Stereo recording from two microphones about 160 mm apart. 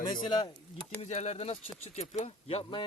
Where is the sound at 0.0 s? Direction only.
30° left (ahead or behind).